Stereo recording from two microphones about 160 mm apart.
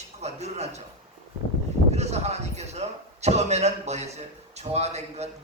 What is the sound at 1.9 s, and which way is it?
Speech, 45° right (ahead or behind).